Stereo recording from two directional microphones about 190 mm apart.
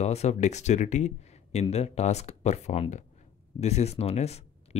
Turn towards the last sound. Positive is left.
turn(degrees=35)  # may be behind; listen again after turning